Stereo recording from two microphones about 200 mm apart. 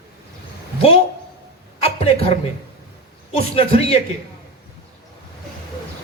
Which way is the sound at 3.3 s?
30° left (ahead or behind).